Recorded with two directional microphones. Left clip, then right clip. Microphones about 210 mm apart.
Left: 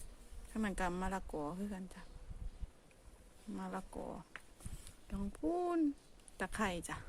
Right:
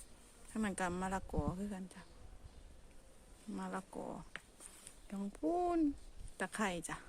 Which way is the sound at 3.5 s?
5° right (ahead or behind).